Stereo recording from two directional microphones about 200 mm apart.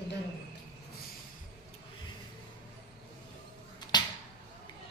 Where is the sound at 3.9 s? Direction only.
20° left (ahead or behind).